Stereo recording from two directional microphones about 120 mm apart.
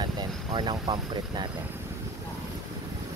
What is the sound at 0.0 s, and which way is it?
Vehicle, 40° right (ahead or behind).